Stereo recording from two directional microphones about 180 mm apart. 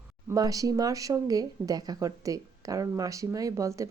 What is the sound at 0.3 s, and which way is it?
A woman's voice, 20° right (ahead or behind).